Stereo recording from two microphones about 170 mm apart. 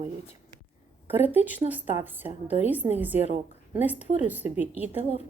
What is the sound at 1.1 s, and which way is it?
A woman's voice, 10° right (ahead or behind).